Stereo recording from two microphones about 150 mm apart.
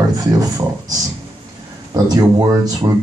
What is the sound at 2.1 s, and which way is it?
Speech, 25° right (ahead or behind).